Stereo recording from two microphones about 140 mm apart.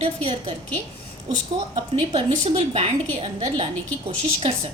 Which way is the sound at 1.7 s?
45° right (ahead or behind).